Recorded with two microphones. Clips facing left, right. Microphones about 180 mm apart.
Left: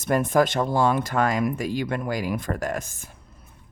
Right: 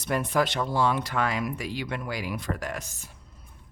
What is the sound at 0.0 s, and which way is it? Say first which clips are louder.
Speech: left 5 dB; 45° left (ahead or behind).